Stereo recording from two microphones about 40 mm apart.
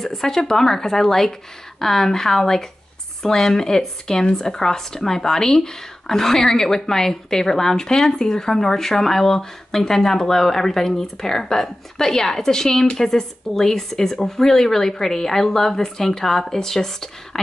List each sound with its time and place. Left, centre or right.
0.0 s speech: centre